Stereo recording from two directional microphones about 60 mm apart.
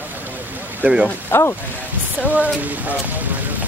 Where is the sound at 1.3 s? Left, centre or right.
Left.